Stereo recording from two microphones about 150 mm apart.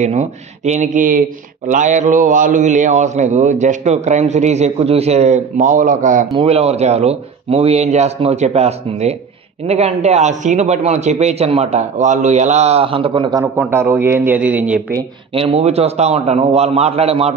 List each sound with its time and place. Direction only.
0.0 s a man's voice: 50° right (ahead or behind)
6.3 s a man's voice: 40° right (ahead or behind)
13.6 s speech: 15° right (ahead or behind)
15.3 s a man's voice: 40° right (ahead or behind)